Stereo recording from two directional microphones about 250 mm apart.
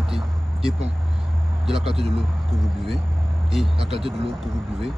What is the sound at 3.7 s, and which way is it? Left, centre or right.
Speech, right.